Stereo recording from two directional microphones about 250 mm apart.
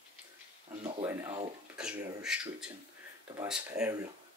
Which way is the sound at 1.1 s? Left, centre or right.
Centre.